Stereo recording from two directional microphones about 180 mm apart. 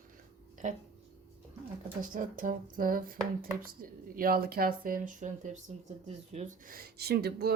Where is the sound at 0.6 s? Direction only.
45° right (ahead or behind).